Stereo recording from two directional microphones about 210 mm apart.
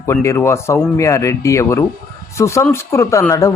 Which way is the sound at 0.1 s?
15° left (ahead or behind).